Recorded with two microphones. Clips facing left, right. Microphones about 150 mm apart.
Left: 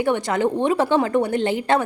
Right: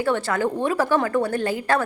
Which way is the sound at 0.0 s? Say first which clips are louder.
Left 2 dB; 20° left (ahead or behind).